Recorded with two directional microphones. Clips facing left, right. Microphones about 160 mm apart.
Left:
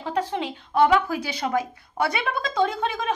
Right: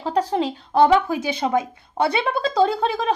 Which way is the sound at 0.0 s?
35° right (ahead or behind).